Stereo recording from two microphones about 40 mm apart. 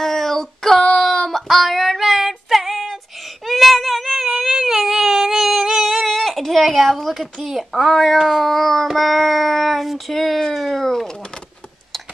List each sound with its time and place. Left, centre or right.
0.0 s child singing: centre
0.9 s a sound: centre
1.5 s child singing: centre
3.2 s whimper: centre
7.4 s child singing: centre
10.4 s speech: centre